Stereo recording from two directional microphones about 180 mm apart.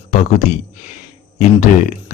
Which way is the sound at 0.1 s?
40° left (ahead or behind).